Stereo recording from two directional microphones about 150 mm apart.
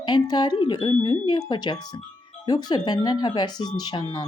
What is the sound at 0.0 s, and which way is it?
Speech, 30° left (ahead or behind).